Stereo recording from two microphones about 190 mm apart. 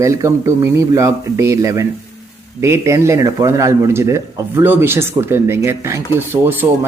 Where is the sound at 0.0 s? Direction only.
15° right (ahead or behind).